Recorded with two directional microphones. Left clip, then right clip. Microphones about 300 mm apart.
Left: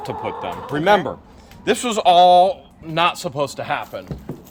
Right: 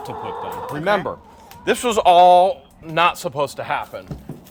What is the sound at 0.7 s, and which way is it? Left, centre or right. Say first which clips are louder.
A man's voice: left 4 dB; centre.